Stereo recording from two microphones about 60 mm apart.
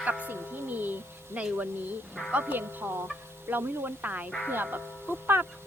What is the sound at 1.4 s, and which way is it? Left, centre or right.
A woman's voice, right.